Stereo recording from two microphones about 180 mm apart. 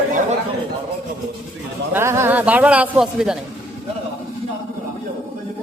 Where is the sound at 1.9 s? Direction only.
15° right (ahead or behind).